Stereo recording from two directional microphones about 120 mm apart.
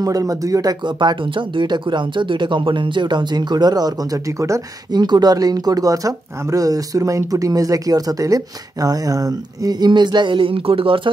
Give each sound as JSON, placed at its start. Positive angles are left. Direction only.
{"t": 0.0, "sound": "speech", "side_deg": -30}